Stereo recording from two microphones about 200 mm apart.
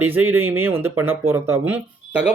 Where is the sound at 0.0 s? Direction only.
10° right (ahead or behind).